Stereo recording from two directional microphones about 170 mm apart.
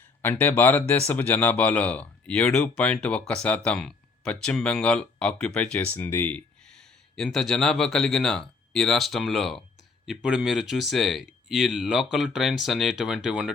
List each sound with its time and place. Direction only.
0.2 s speech: 10° left (ahead or behind); by 13.5 s 5° right (ahead or behind)